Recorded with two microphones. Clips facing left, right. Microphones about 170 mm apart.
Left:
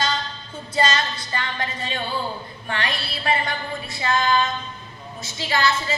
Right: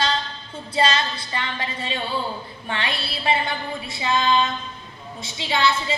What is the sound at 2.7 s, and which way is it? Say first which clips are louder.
Female singing: even; 25° right (ahead or behind).